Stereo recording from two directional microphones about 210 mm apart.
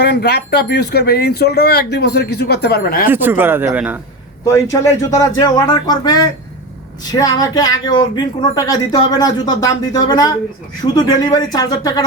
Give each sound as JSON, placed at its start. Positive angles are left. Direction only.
{"t": 0.0, "sound": "speech", "side_deg": 50}
{"t": 3.1, "sound": "speech", "side_deg": -10}
{"t": 4.5, "sound": "speech", "side_deg": 15}